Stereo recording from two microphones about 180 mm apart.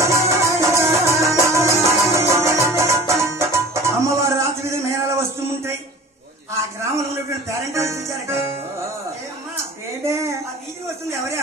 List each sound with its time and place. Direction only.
0.0 s music: 15° right (ahead or behind)
7.7 s music: 15° right (ahead or behind)
10.0 s a sound: 15° right (ahead or behind)